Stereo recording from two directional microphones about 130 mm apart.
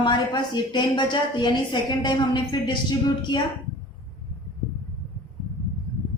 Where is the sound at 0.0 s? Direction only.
35° left (ahead or behind).